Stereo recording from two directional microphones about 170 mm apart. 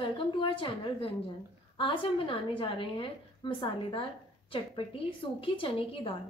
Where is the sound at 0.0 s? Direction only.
30° left (ahead or behind).